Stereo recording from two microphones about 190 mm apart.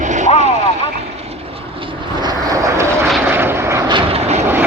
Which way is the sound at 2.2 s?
20° right (ahead or behind).